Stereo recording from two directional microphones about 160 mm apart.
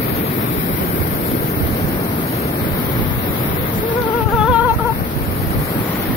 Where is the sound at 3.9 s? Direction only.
10° left (ahead or behind).